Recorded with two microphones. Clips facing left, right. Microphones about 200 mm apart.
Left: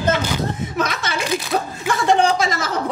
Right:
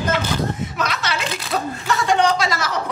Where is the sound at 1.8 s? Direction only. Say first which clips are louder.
Left 1 dB; 50° left (ahead or behind).